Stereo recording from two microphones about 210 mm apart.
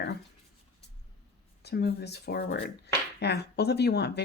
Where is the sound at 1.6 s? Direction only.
50° left (ahead or behind).